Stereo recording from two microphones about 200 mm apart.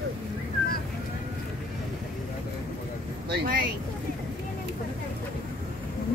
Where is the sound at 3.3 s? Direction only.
50° right (ahead or behind).